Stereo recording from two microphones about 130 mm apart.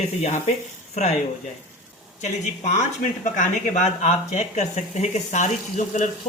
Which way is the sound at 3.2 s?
80° left.